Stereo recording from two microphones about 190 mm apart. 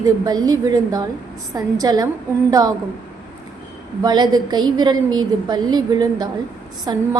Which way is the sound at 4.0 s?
20° right (ahead or behind).